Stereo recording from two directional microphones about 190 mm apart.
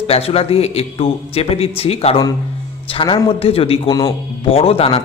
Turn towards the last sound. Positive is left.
turn(degrees=30)  # may be behind; listen again after turning